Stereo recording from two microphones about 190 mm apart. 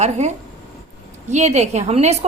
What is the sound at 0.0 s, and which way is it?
Speech, 35° right (ahead or behind).